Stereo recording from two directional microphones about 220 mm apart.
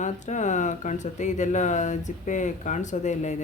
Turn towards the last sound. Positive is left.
turn(degrees=30)  # may be behind; listen again after turning